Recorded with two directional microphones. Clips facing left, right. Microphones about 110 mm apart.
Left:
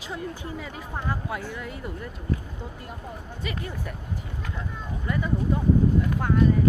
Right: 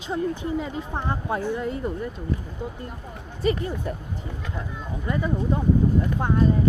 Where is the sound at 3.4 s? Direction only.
30° right (ahead or behind).